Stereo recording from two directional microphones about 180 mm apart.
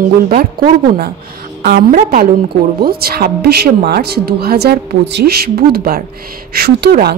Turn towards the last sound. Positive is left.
turn(degrees=-60)  # may be behind; listen again after turning